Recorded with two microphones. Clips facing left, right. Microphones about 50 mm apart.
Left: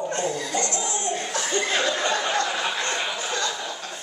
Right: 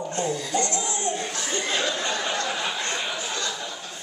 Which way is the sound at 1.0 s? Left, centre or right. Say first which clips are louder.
Even; right.